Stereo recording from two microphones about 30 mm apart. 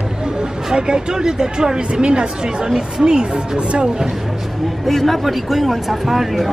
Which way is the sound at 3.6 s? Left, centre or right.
Right.